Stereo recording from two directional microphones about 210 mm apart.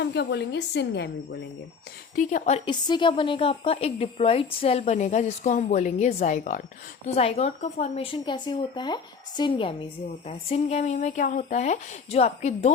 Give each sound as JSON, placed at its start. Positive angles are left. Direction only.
{"t": 0.0, "sound": "a woman's voice", "side_deg": 55}
{"t": 2.1, "sound": "speech", "side_deg": 35}
{"t": 2.6, "sound": "a woman's voice", "side_deg": 20}